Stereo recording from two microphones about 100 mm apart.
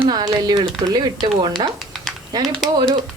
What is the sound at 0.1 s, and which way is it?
Speech, 45° right (ahead or behind).